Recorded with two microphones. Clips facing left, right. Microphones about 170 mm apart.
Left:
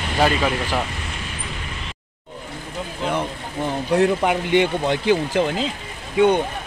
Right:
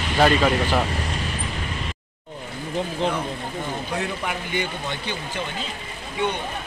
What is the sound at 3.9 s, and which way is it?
Speech, 70° left (ahead or behind).